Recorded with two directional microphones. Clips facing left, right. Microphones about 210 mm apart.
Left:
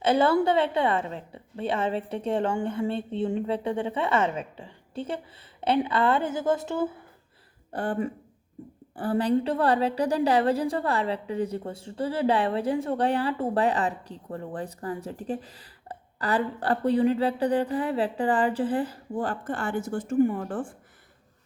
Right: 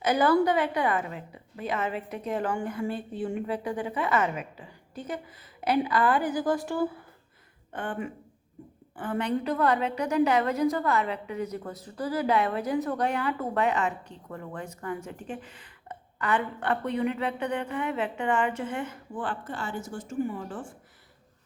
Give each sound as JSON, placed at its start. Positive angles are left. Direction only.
{"t": 0.0, "sound": "a woman's voice", "side_deg": 25}
{"t": 7.7, "sound": "a woman's voice", "side_deg": 35}